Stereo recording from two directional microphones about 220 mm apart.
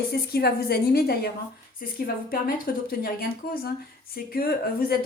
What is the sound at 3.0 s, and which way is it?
Speech, 45° left (ahead or behind).